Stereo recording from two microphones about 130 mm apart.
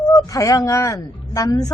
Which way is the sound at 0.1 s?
25° left (ahead or behind).